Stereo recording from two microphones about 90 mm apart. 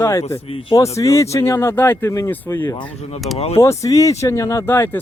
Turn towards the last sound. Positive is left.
turn(degrees=25)  # may be behind; listen again after turning